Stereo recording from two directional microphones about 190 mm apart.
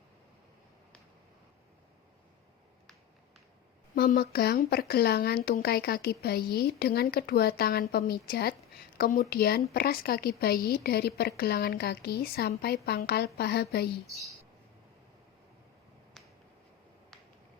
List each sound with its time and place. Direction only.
3.9 s speech: 50° left (ahead or behind)